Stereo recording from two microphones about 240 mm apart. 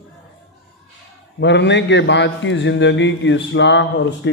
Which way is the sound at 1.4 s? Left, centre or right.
Left.